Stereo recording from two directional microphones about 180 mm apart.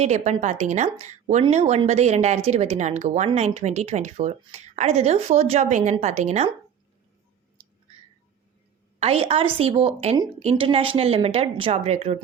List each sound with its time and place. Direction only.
0.0 s a woman's voice: 40° right (ahead or behind)
9.0 s a woman's voice: 35° right (ahead or behind)